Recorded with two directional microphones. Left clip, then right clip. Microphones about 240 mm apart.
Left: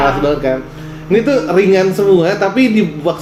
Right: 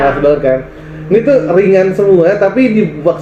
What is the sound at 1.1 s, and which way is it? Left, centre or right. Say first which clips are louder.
Speech: right 3 dB; centre.